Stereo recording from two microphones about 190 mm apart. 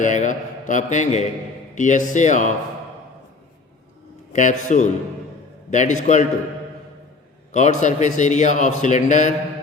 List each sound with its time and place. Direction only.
0.0 s a man's voice: 40° left (ahead or behind)
4.3 s a man's voice: 40° left (ahead or behind)
7.5 s a man's voice: 40° left (ahead or behind)